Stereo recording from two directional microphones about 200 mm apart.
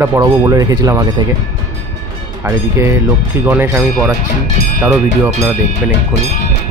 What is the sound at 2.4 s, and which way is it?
Speech, 15° right (ahead or behind).